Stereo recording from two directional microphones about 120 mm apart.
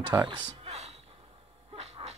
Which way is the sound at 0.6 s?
65° right (ahead or behind).